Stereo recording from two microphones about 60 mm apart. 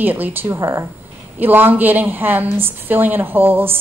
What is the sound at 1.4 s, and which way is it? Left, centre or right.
A woman's voice, right.